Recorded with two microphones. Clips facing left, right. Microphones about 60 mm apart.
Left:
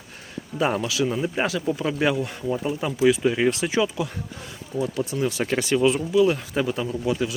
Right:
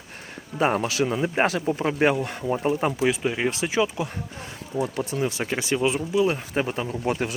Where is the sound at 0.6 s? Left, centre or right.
Right.